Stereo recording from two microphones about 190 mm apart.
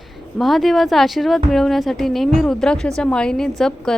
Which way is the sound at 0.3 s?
Centre (ahead or behind).